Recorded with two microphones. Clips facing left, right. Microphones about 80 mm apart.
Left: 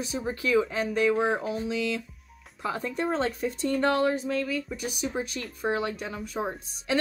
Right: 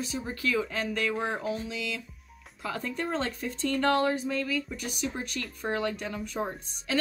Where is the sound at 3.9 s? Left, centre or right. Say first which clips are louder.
Left 1 dB; centre.